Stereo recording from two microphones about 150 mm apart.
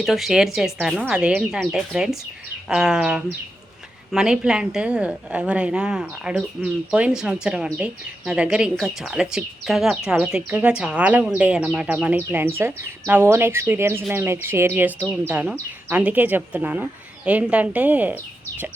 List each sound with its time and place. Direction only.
0.0 s a woman's voice: centre (ahead or behind)